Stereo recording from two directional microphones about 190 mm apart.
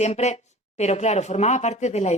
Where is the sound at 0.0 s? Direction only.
35° left (ahead or behind).